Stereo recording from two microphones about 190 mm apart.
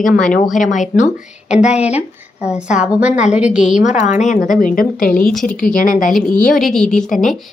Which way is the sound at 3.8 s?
35° left (ahead or behind).